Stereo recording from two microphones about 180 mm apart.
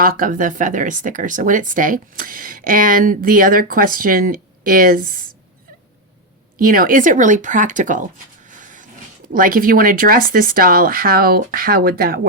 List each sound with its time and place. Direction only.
0.0 s speech: 50° right (ahead or behind)
6.6 s speech: 50° right (ahead or behind)
8.4 s vehicle: 45° right (ahead or behind)
9.3 s speech: 50° right (ahead or behind)